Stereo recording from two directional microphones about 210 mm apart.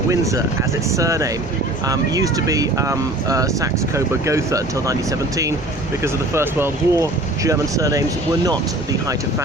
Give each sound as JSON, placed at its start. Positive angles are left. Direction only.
{"t": 0.1, "sound": "speech", "side_deg": -15}
{"t": 6.0, "sound": "speech", "side_deg": -10}